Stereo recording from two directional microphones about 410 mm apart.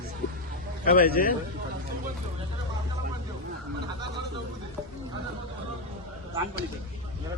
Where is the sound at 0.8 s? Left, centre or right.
Left.